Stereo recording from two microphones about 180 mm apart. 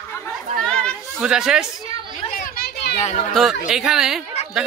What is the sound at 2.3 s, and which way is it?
Children playing, 55° left (ahead or behind).